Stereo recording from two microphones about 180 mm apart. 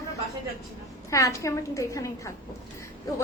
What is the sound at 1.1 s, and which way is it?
A woman's voice, 15° left (ahead or behind).